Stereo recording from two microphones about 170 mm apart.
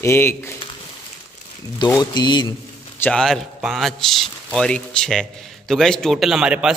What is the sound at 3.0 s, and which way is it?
A man's voice, 5° left (ahead or behind).